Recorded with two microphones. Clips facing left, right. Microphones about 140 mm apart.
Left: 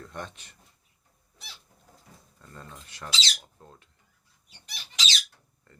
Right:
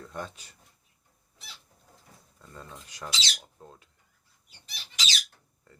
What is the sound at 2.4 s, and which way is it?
Speech, 5° right (ahead or behind).